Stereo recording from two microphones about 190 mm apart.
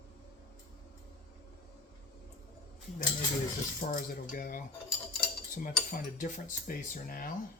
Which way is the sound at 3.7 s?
45° left (ahead or behind).